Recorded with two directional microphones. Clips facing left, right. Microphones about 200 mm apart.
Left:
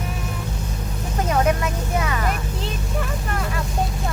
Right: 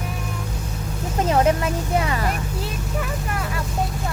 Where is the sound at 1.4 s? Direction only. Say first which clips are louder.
Right 2 dB; 30° right (ahead or behind).